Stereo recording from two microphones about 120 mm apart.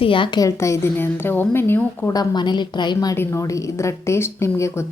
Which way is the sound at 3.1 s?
20° left (ahead or behind).